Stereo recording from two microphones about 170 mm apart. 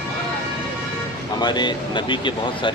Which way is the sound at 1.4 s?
25° left (ahead or behind).